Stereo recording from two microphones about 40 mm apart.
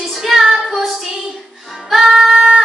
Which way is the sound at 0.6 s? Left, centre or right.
Centre.